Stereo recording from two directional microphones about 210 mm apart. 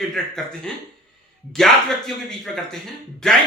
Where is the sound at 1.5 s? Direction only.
Centre (ahead or behind).